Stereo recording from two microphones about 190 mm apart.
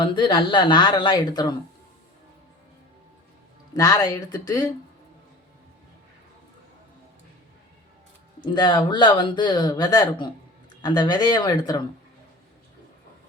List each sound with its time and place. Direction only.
0.0 s speech: 25° left (ahead or behind)
3.8 s speech: 20° left (ahead or behind)
8.4 s speech: 20° left (ahead or behind)